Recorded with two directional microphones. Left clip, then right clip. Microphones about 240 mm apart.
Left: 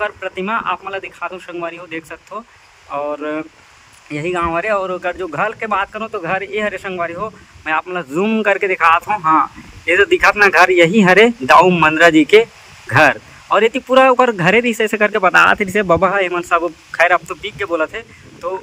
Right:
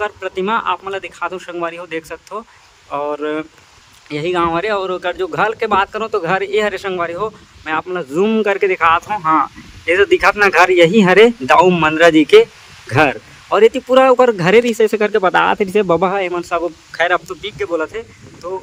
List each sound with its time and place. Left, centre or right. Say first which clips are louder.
0.0 s speech: right 1 dB; centre